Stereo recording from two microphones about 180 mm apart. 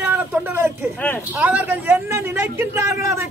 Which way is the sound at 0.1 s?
10° right (ahead or behind).